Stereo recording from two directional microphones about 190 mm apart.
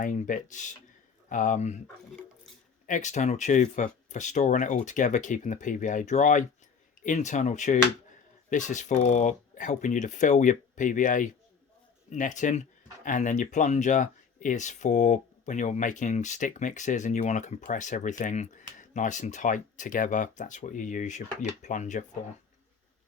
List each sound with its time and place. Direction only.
0.0 s speech: 45° left (ahead or behind)
2.8 s speech: 40° left (ahead or behind)